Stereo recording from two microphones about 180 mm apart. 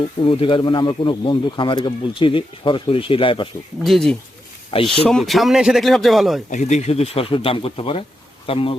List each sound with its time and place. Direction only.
0.2 s speech: 30° left (ahead or behind)
3.8 s speech: centre (ahead or behind)
4.7 s speech: 30° left (ahead or behind)
5.0 s speech: centre (ahead or behind)
6.5 s speech: 40° left (ahead or behind)